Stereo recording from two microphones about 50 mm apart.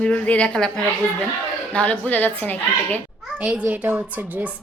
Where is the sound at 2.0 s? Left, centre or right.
Left.